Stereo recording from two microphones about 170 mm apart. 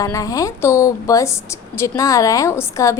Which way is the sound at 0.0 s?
20° left (ahead or behind).